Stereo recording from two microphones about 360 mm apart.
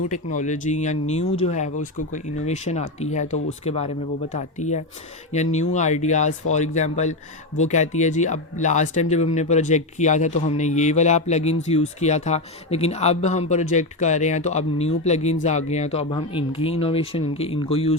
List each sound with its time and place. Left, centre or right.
0.1 s speech: left